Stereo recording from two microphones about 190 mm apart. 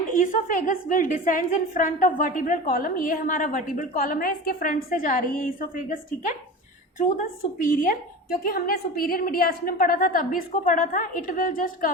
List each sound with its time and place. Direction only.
0.1 s a woman's voice: 45° left (ahead or behind)
7.6 s a woman's voice: 45° left (ahead or behind)